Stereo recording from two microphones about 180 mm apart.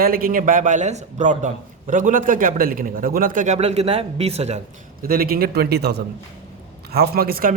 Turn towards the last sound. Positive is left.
turn(degrees=-55)  # may be behind; listen again after turning